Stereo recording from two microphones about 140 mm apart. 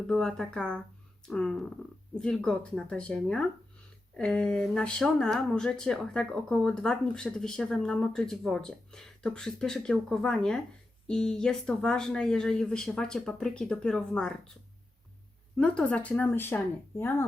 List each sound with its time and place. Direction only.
0.1 s speech: 5° left (ahead or behind)
15.5 s speech: 10° left (ahead or behind)